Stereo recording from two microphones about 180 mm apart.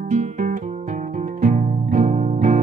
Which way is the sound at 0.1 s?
45° right (ahead or behind).